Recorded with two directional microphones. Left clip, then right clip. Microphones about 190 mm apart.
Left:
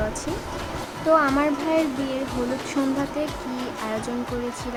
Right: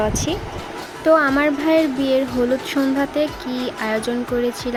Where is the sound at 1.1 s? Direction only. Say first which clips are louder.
Right 4 dB; 25° right (ahead or behind).